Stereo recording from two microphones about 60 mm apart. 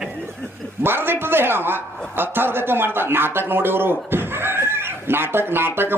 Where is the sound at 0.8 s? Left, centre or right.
Right.